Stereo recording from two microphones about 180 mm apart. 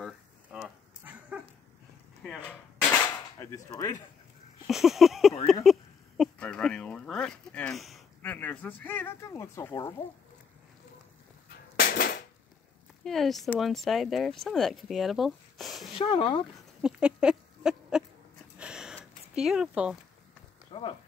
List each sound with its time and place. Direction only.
0.0 s dog: 5° right (ahead or behind)
2.9 s cap gun: 15° left (ahead or behind)
4.6 s speech: centre (ahead or behind); by 9.8 s 15° left (ahead or behind)
11.8 s a sound: 55° left (ahead or behind)
13.0 s speech: centre (ahead or behind)
15.9 s speech: 25° left (ahead or behind)
16.8 s a sound: 5° right (ahead or behind)
18.6 s gasp: 5° right (ahead or behind)
19.3 s speech: 5° right (ahead or behind)
20.7 s a sound: 25° left (ahead or behind)